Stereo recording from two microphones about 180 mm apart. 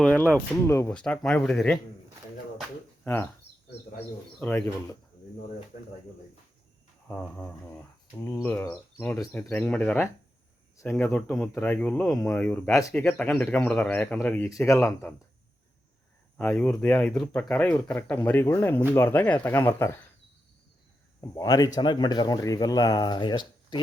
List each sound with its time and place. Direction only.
0.0 s speech: 10° left (ahead or behind)
0.9 s speech: 5° left (ahead or behind)
2.6 s a sound: 10° left (ahead or behind)
4.4 s speech: 10° left (ahead or behind)
7.2 s speech: 5° left (ahead or behind)
9.1 s speech: centre (ahead or behind); by 15.1 s 15° left (ahead or behind)
16.4 s speech: 5° left (ahead or behind)
21.2 s speech: 20° left (ahead or behind)